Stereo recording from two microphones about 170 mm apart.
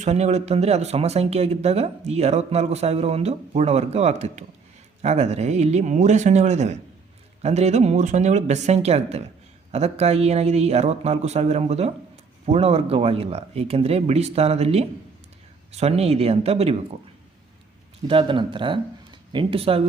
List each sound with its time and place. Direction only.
0.0 s speech: 40° right (ahead or behind)
18.1 s speech: 30° right (ahead or behind)